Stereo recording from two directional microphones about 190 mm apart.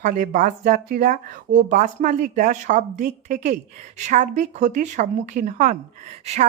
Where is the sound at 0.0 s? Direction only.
45° right (ahead or behind).